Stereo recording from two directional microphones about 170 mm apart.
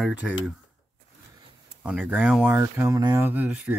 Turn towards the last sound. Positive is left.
turn(degrees=-10)  # may be behind; listen again after turning